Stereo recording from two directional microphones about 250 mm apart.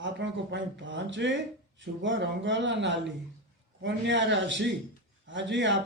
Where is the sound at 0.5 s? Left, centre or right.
Right.